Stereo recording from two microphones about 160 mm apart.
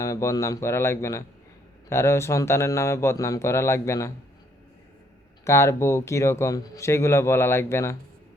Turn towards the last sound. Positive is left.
turn(degrees=15)  # may be behind; listen again after turning